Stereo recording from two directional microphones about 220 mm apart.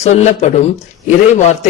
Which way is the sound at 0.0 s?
30° left (ahead or behind).